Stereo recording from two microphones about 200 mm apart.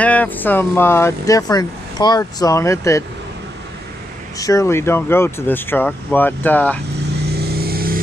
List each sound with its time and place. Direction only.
0.0 s speech: 5° left (ahead or behind)
4.4 s speech: 15° left (ahead or behind)
7.2 s vehicle: 55° right (ahead or behind)